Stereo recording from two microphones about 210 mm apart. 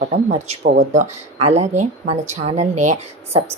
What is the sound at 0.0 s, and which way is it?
Speech, 30° right (ahead or behind).